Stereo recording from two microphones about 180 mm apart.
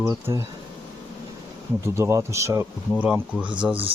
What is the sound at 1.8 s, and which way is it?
Speech, 15° right (ahead or behind).